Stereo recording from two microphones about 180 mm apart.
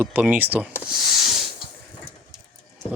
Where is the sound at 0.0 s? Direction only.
10° right (ahead or behind).